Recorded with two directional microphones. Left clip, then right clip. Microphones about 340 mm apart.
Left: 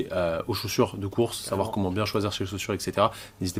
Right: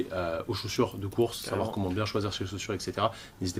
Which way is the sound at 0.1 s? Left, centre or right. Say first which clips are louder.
Left 5 dB; left.